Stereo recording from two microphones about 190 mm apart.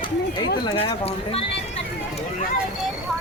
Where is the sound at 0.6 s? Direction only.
25° left (ahead or behind).